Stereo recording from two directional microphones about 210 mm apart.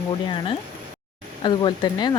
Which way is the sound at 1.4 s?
20° left (ahead or behind).